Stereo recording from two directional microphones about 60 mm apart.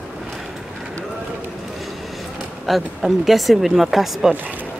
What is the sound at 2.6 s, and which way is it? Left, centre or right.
A woman's voice, centre.